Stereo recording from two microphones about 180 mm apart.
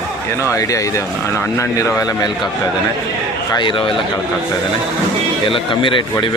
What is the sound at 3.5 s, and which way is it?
Speech, 25° left (ahead or behind).